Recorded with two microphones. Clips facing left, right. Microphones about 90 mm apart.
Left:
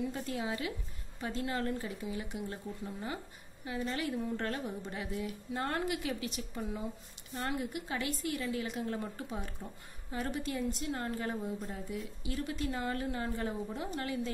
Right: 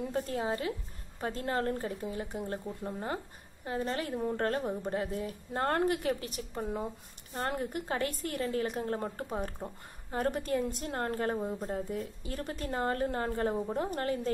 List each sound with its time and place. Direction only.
0.0 s a woman's voice: 45° right (ahead or behind)